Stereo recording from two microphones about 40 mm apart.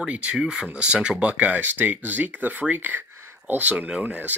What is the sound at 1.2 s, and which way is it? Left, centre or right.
Speech, right.